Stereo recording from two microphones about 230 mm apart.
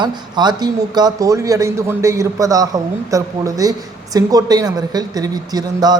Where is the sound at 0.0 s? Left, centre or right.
Centre.